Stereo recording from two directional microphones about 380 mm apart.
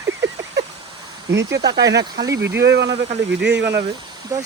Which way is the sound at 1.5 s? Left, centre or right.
Centre.